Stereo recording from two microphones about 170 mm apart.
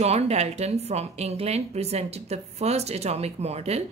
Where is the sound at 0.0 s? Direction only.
40° right (ahead or behind).